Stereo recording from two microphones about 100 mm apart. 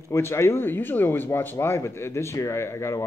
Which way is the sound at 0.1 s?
25° left (ahead or behind).